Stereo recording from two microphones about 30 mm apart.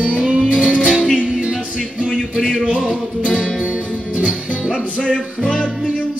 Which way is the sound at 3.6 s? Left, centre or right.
Right.